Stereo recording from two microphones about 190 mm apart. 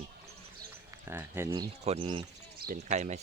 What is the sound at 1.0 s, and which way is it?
Speech, 10° right (ahead or behind).